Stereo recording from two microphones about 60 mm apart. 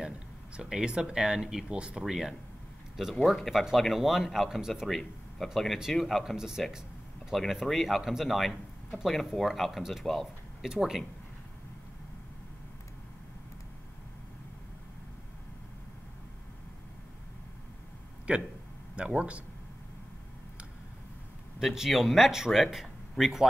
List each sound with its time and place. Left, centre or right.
0.6 s speech: centre
6.3 s speech: centre
18.3 s speech: centre
21.5 s speech: centre